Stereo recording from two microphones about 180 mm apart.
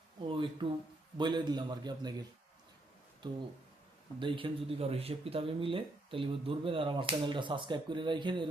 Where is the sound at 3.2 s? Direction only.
25° right (ahead or behind).